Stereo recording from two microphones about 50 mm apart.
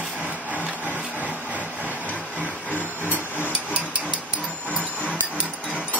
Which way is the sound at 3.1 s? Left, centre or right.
Right.